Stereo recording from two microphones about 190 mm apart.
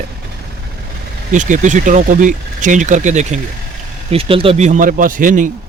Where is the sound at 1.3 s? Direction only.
40° right (ahead or behind).